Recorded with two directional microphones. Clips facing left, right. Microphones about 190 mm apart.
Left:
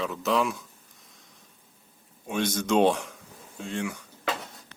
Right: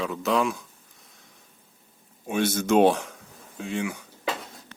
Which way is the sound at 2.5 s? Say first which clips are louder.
Right 3 dB; 5° right (ahead or behind).